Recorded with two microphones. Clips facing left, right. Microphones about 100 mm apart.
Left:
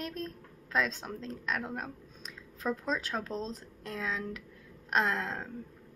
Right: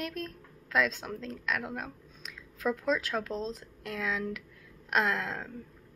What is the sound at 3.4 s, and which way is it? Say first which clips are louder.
A woman's voice: right 2 dB; 35° left (ahead or behind).